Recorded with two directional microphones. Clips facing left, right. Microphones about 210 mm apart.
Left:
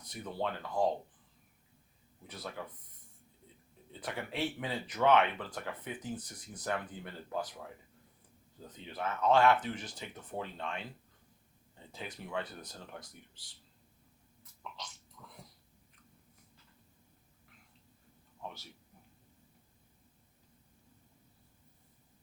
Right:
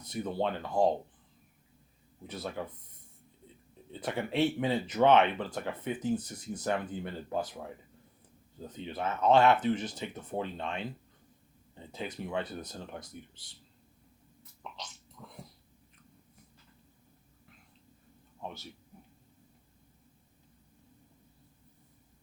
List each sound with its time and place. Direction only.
0.0 s speech: 25° right (ahead or behind)
2.2 s speech: 25° right (ahead or behind)
4.0 s speech: 25° right (ahead or behind)
8.9 s speech: 25° right (ahead or behind)
11.9 s speech: 20° right (ahead or behind)
15.2 s a sound: 25° right (ahead or behind)